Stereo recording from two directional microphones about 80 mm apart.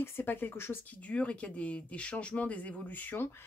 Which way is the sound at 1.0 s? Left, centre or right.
Centre.